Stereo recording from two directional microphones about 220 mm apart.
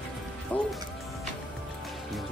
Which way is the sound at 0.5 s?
5° left (ahead or behind).